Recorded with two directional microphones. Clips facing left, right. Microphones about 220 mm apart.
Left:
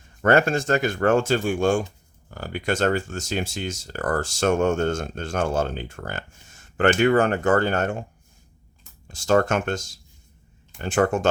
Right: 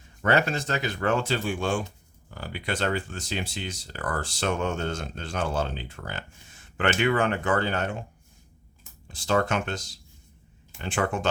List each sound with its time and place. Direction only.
0.2 s speech: 50° left (ahead or behind)
9.0 s speech: 45° left (ahead or behind)